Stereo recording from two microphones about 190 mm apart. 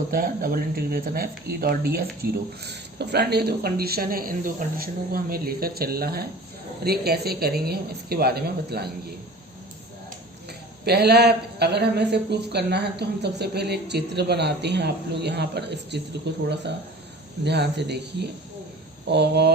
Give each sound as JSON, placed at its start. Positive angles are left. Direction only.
{"t": 0.1, "sound": "a man's voice", "side_deg": -50}
{"t": 10.8, "sound": "a man's voice", "side_deg": -55}
{"t": 17.4, "sound": "a man's voice", "side_deg": -65}